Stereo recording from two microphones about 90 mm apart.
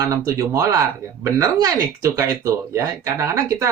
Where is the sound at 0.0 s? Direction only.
35° right (ahead or behind).